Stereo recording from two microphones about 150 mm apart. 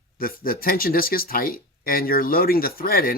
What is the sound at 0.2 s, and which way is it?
Speech, 80° left.